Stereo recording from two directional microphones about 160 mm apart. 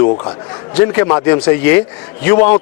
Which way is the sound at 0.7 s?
10° left (ahead or behind).